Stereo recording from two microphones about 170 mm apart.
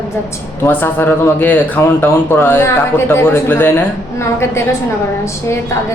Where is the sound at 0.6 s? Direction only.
15° left (ahead or behind).